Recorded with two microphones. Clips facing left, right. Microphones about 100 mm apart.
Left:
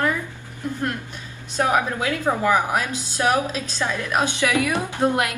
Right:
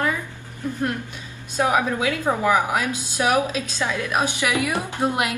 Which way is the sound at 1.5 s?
15° right (ahead or behind).